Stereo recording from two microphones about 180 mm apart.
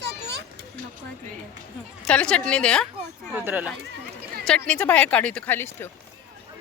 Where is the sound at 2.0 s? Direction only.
5° left (ahead or behind).